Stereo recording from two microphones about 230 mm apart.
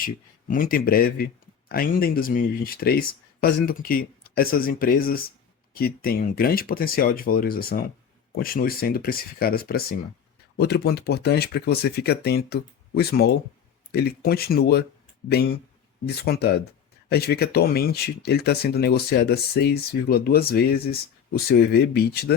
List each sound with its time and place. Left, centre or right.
0.0 s speech: left
16.0 s speech: left